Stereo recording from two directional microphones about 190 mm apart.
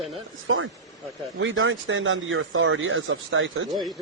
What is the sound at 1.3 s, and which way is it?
Speech, 90° right.